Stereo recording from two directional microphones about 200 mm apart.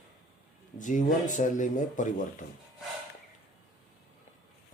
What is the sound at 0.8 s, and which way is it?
Speech, 40° left (ahead or behind).